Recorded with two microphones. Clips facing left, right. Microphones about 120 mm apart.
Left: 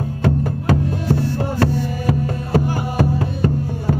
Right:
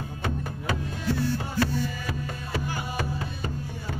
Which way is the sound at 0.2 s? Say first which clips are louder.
Left 12 dB; 75° left (ahead or behind).